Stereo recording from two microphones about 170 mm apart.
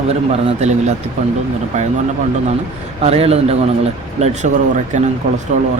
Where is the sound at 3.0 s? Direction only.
40° right (ahead or behind).